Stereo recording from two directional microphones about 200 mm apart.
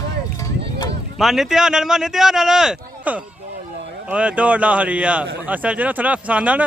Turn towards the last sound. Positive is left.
turn(degrees=-5)  # may be behind; listen again after turning